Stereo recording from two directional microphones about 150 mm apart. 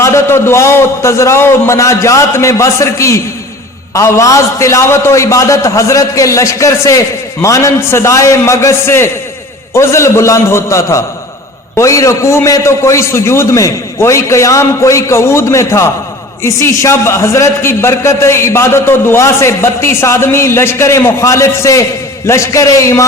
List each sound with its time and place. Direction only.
0.0 s a man's voice: 20° left (ahead or behind)